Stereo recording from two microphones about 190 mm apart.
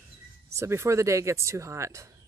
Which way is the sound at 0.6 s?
15° right (ahead or behind).